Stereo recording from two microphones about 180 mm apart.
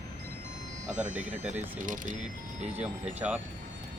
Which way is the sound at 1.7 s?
50° right (ahead or behind).